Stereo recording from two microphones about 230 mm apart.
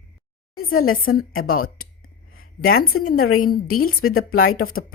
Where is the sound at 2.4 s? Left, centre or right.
Left.